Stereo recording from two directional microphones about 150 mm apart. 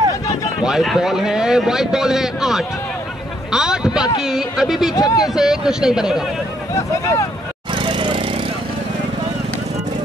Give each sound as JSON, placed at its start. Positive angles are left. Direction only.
{"t": 0.7, "sound": "a man's voice", "side_deg": -5}
{"t": 3.5, "sound": "a sound", "side_deg": -5}
{"t": 4.2, "sound": "a man's voice", "side_deg": -5}
{"t": 4.9, "sound": "speech", "side_deg": 25}
{"t": 5.2, "sound": "a man's voice", "side_deg": -5}
{"t": 6.7, "sound": "speech", "side_deg": 20}
{"t": 7.7, "sound": "vehicle", "side_deg": -35}